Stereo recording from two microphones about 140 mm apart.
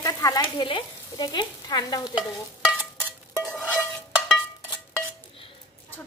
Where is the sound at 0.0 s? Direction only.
25° left (ahead or behind).